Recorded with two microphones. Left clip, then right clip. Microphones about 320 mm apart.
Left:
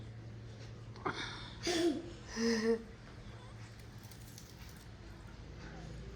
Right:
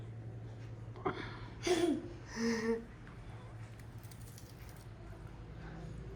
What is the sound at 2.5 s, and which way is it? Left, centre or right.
Speech, centre.